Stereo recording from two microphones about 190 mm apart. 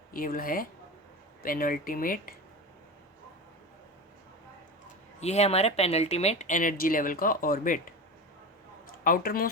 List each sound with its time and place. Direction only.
0.1 s speech: 50° left (ahead or behind)
5.2 s speech: 35° left (ahead or behind)
8.9 s speech: 50° left (ahead or behind)